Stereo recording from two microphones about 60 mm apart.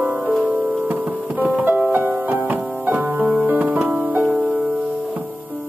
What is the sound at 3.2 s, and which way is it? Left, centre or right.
Music, centre.